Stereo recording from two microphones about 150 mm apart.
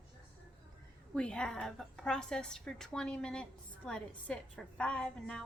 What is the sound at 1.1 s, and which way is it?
A woman's voice, 5° left (ahead or behind).